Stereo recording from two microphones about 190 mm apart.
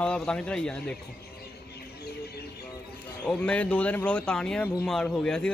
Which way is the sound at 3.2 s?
5° left (ahead or behind).